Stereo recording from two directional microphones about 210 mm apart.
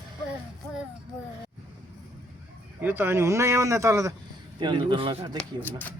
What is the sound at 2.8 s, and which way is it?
A man's voice, 10° right (ahead or behind).